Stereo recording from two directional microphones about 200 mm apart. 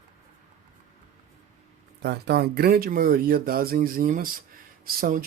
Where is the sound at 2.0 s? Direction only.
55° right (ahead or behind).